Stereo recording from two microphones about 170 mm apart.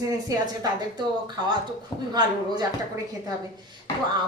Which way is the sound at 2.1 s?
25° right (ahead or behind).